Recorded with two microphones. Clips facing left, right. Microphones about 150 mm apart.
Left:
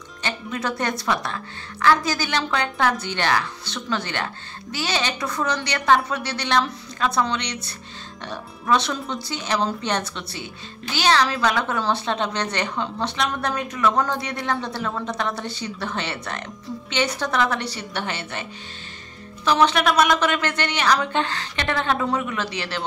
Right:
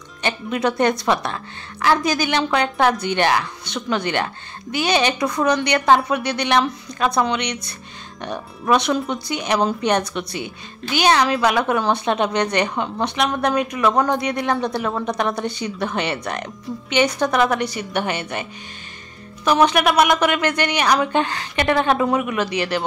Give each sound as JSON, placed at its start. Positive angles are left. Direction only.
{"t": 0.2, "sound": "speech", "side_deg": -20}